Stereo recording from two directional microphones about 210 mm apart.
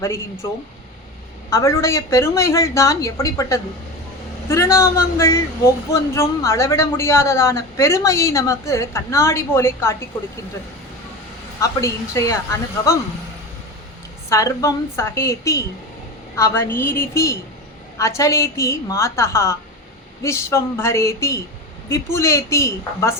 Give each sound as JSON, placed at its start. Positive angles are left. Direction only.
{"t": 0.4, "sound": "a woman's voice", "side_deg": 15}
{"t": 11.6, "sound": "a woman's voice", "side_deg": 15}
{"t": 14.3, "sound": "a woman's voice", "side_deg": 15}